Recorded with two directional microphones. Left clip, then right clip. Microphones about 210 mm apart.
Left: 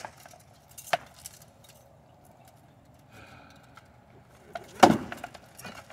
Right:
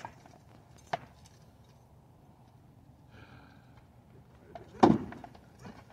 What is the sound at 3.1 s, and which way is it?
Horse, 55° left (ahead or behind).